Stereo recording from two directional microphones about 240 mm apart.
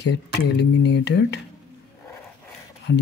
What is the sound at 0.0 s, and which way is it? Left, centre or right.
Speech, left.